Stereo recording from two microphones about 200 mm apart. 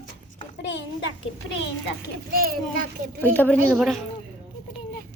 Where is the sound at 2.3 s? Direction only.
45° right (ahead or behind).